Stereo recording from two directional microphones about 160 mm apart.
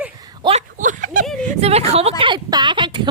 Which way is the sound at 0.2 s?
25° right (ahead or behind).